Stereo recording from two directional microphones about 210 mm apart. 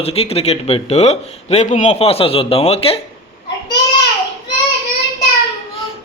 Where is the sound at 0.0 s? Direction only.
30° left (ahead or behind).